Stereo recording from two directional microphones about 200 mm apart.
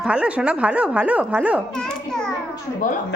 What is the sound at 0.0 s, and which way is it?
A child's voice, 5° right (ahead or behind).